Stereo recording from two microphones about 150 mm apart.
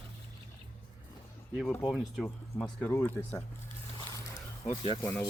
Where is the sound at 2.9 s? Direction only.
15° left (ahead or behind).